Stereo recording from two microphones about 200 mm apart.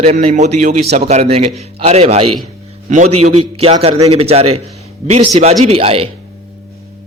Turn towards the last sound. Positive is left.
turn(degrees=-30)  # may be behind; listen again after turning